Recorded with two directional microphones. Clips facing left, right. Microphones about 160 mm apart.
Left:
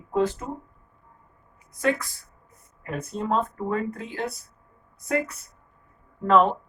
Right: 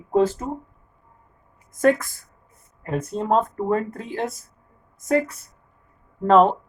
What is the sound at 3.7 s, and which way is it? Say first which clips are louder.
A woman's voice: right 4 dB; 45° right (ahead or behind).